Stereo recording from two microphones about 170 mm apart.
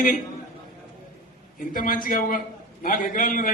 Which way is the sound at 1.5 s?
55° left (ahead or behind).